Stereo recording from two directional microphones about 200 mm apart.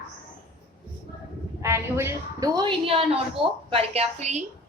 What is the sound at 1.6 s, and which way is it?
A woman's voice, 15° right (ahead or behind).